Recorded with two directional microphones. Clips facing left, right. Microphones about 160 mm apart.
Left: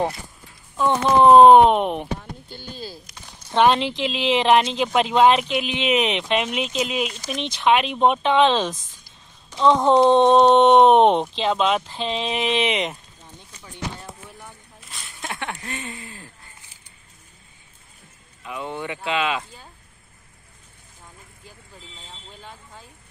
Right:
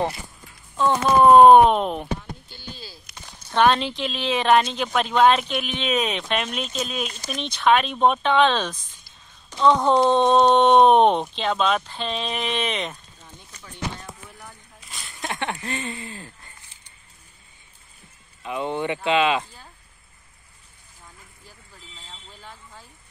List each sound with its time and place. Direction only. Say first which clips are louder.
0.7 s speech: left 1 dB; 20° left (ahead or behind)
2.4 s speech: left 5 dB; 50° left (ahead or behind)
3.5 s speech: left 1 dB; 15° left (ahead or behind)
14.4 s a sound: left 1 dB; centre (ahead or behind)
15.7 s speech: right 3 dB; 5° left (ahead or behind)
18.4 s speech: right 4 dB; 25° right (ahead or behind)